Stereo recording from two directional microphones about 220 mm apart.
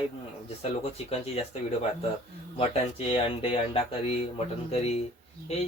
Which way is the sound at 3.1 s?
25° left (ahead or behind).